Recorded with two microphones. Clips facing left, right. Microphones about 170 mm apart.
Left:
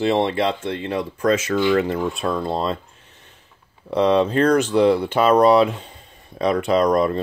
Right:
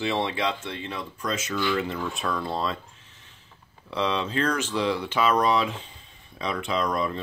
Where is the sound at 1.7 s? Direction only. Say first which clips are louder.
Left 8 dB; 55° left (ahead or behind).